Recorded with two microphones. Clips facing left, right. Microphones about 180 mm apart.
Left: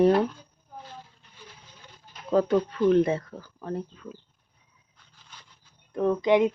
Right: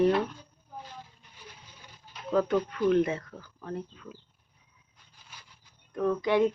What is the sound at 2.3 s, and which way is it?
Speech, 30° left (ahead or behind).